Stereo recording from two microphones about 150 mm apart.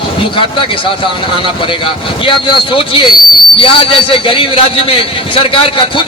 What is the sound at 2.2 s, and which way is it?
A man's voice, 35° left (ahead or behind).